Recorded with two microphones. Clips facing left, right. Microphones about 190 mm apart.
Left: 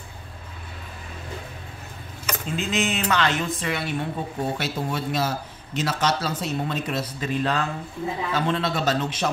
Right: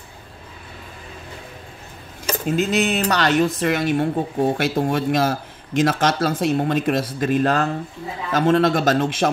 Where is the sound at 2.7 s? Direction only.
35° right (ahead or behind).